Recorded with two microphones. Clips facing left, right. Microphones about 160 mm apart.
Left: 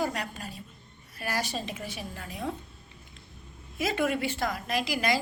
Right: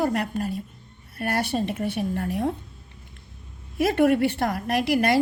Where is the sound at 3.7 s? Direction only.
60° right (ahead or behind).